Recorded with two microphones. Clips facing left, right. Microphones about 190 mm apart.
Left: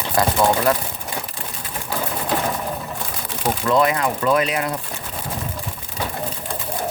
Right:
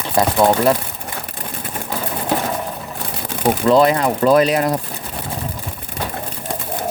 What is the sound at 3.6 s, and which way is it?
Speech, 30° right (ahead or behind).